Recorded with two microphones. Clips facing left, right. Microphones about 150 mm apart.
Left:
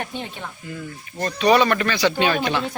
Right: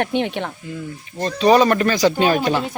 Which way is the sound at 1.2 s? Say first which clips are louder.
Right 3 dB; 30° right (ahead or behind).